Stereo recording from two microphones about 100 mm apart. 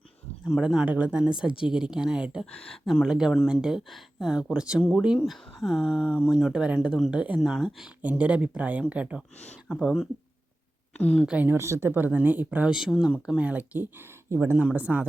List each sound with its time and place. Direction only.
0.4 s speech: centre (ahead or behind)
0.9 s speech: 15° right (ahead or behind)
2.5 s speech: 5° left (ahead or behind); by 4.8 s 10° right (ahead or behind)
4.8 s speech: centre (ahead or behind)
7.3 s speech: centre (ahead or behind)
8.0 s speech: 15° right (ahead or behind)
10.9 s speech: 10° left (ahead or behind)
11.3 s speech: 15° right (ahead or behind)
11.5 s speech: 25° right (ahead or behind)